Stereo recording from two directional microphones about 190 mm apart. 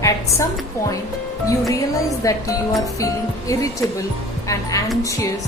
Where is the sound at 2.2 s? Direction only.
20° left (ahead or behind).